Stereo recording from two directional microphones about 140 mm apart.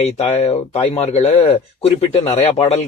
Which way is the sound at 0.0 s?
50° left (ahead or behind).